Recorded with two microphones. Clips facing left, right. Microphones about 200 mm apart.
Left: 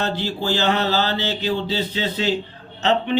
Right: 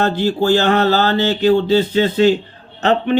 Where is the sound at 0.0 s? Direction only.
50° right (ahead or behind).